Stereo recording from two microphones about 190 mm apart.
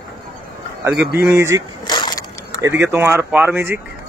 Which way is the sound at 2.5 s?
15° right (ahead or behind).